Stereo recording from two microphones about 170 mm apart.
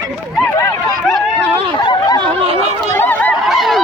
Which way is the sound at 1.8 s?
25° left (ahead or behind).